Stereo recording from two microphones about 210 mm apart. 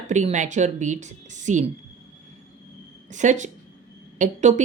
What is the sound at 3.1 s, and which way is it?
Speech, 35° right (ahead or behind).